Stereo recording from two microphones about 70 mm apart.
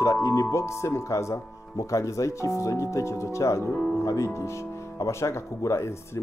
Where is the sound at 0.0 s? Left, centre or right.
Left.